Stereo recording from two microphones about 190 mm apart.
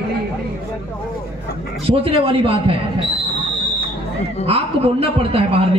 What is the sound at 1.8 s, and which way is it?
Speech, 30° right (ahead or behind).